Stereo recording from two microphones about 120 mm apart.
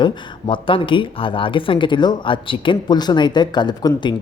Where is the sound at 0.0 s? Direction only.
40° left (ahead or behind).